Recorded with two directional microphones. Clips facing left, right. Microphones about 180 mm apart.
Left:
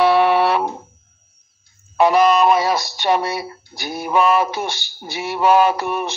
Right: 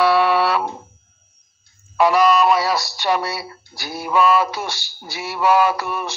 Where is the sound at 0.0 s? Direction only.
20° left (ahead or behind).